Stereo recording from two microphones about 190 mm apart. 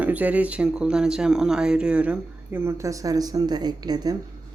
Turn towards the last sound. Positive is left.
turn(degrees=-20)  # may be behind; listen again after turning